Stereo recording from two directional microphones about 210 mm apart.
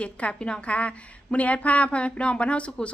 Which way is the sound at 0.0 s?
5° left (ahead or behind).